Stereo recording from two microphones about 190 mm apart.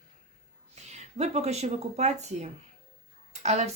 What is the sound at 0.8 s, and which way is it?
Speech, 35° right (ahead or behind).